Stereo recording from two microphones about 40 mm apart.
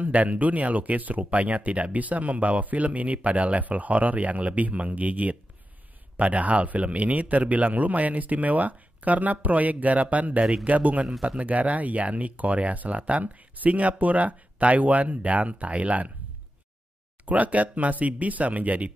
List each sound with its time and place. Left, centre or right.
0.0 s speech: right
17.2 s speech: right